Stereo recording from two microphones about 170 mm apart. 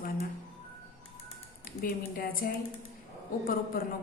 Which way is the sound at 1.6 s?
55° left (ahead or behind).